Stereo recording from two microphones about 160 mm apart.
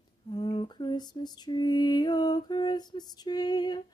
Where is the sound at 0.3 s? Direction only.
30° left (ahead or behind).